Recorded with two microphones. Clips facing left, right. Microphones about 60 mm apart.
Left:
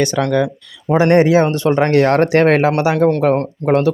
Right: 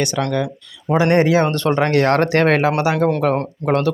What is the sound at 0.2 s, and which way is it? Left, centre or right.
Speech, left.